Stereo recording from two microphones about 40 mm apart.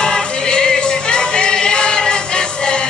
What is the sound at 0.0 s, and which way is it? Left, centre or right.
Music, left.